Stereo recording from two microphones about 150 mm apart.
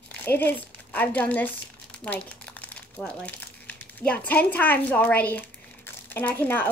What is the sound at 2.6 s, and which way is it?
Speech, 10° left (ahead or behind).